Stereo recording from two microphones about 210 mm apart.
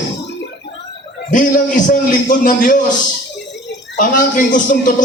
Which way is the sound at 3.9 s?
40° left (ahead or behind).